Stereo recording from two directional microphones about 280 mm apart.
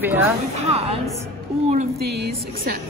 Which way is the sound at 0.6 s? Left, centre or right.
Right.